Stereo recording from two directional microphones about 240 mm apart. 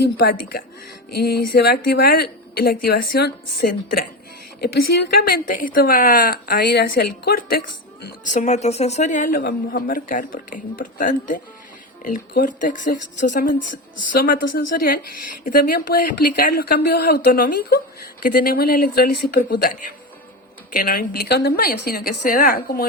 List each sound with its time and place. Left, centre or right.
0.0 s a woman's voice: left
1.5 s a woman's voice: left
20.7 s a woman's voice: left